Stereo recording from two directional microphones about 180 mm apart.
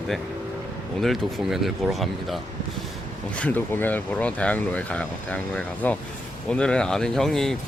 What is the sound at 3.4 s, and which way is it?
Speech, 10° left (ahead or behind).